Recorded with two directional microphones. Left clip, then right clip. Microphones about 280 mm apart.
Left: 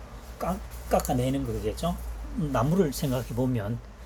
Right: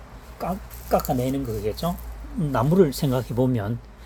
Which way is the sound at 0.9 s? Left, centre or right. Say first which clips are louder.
Right 3 dB; right.